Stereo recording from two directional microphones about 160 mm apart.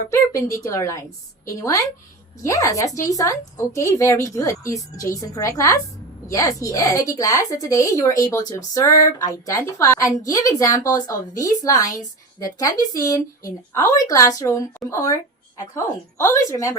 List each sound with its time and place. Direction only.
0.1 s speech: 20° left (ahead or behind)